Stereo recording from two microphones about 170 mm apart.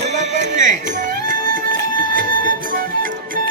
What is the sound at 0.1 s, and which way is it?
Music, 45° right (ahead or behind).